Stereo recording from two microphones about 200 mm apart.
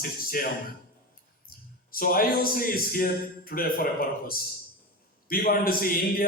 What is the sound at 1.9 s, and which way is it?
A man's voice, 45° left (ahead or behind).